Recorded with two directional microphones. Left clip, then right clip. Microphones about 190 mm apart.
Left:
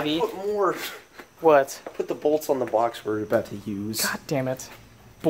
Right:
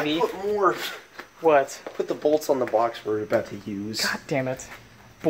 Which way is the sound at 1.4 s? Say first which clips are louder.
Left 1 dB; 20° left (ahead or behind).